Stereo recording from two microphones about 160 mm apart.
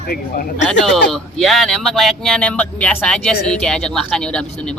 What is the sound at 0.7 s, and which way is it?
Speech, centre (ahead or behind).